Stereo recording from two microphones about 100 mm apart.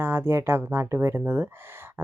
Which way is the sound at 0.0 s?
20° right (ahead or behind).